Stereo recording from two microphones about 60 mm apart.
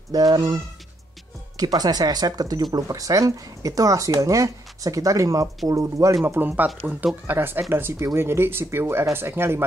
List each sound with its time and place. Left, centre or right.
0.1 s speech: right
1.6 s speech: right
6.2 s speech: right
6.8 s speech: right
7.2 s speech: right